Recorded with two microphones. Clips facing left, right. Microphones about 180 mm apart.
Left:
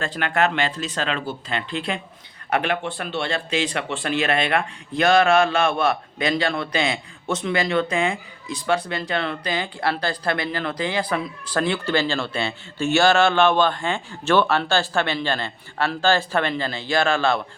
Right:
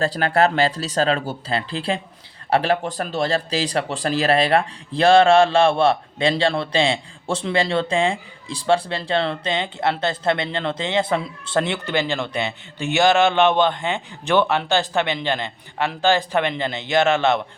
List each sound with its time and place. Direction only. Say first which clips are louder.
0.0 s speech: right 4 dB; 35° right (ahead or behind); by 17.4 s 20° right (ahead or behind)